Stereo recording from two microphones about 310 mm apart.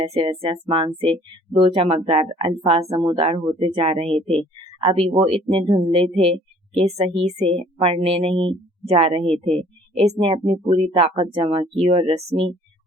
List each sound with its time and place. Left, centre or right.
0.0 s speech: centre
4.1 s speech: centre
4.8 s speech: centre